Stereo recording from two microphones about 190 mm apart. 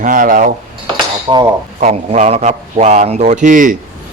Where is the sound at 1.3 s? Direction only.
20° right (ahead or behind).